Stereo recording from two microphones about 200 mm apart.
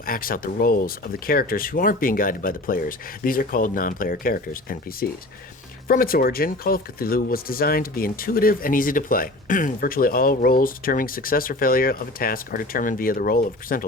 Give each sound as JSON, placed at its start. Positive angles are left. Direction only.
{"t": 0.0, "sound": "speech", "side_deg": 45}